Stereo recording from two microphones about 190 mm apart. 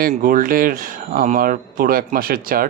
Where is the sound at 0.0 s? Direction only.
45° right (ahead or behind).